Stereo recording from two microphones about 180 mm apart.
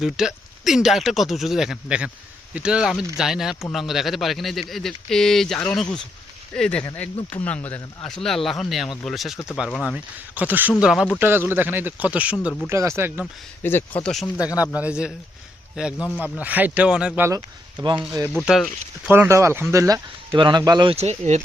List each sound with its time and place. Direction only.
0.0 s speech: 5° right (ahead or behind)
13.6 s speech: 10° left (ahead or behind)
14.5 s speech: 20° left (ahead or behind)
14.8 s speech: 5° right (ahead or behind)
16.0 s speech: 10° left (ahead or behind)
16.4 s speech: 10° right (ahead or behind)
19.1 s speech: 15° right (ahead or behind); by 21.4 s 40° right (ahead or behind)